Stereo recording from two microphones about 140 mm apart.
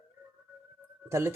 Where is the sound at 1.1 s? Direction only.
20° right (ahead or behind).